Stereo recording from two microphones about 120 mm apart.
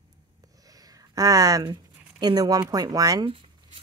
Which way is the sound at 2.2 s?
30° right (ahead or behind).